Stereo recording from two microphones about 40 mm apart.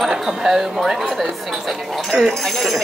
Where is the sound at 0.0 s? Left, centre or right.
Centre.